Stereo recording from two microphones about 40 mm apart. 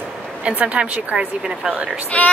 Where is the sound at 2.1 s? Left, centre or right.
Left.